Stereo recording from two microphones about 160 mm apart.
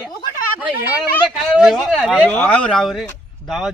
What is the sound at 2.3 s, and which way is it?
Speech, 10° left (ahead or behind).